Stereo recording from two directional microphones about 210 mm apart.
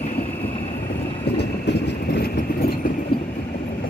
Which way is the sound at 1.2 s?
55° left (ahead or behind).